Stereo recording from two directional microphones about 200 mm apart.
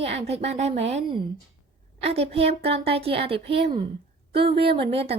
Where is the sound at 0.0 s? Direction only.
30° right (ahead or behind).